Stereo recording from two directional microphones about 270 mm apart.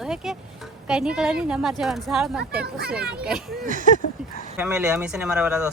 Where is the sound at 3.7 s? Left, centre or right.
Right.